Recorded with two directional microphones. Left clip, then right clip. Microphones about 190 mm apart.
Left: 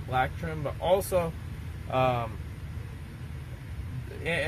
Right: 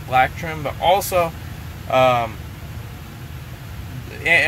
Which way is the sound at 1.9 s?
5° left (ahead or behind).